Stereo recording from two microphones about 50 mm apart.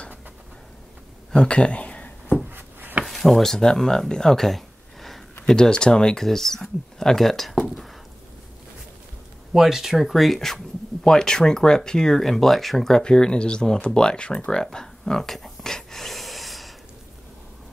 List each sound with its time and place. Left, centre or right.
1.3 s a sound: left
2.5 s a sound: right
3.1 s speech: centre
5.5 s speech: centre
9.5 s speech: centre
14.5 s gasp: centre